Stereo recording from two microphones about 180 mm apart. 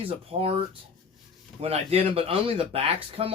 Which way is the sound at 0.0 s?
30° right (ahead or behind).